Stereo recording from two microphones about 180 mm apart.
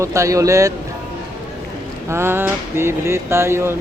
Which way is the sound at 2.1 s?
15° right (ahead or behind).